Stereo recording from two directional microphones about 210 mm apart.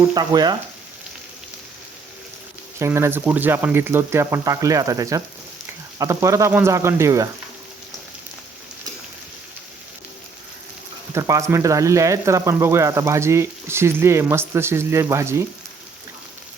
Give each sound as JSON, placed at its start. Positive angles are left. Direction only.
{"t": 0.0, "sound": "frying", "side_deg": -20}
{"t": 2.7, "sound": "speech", "side_deg": -15}
{"t": 11.1, "sound": "speech", "side_deg": -15}